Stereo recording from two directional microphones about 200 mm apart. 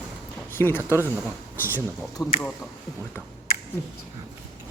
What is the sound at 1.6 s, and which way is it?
Speech, 15° left (ahead or behind).